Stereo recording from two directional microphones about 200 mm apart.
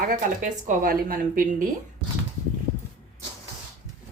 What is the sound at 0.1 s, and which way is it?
Speech, 40° right (ahead or behind).